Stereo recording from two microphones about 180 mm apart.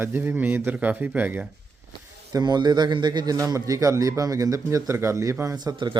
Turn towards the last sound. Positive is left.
turn(degrees=-25)  # may be behind; listen again after turning